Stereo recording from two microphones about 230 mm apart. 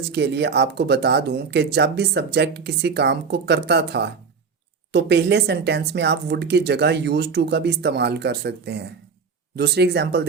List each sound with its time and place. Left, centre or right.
0.1 s speech: right